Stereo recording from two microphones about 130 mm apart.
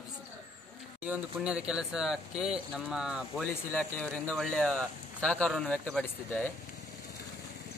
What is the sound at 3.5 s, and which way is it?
Speech, 15° left (ahead or behind).